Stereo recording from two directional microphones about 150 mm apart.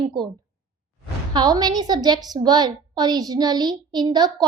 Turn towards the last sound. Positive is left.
turn(degrees=-25)  # may be behind; listen again after turning